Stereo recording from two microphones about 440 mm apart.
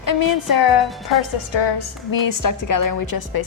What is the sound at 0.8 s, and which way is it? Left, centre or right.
Speech, centre.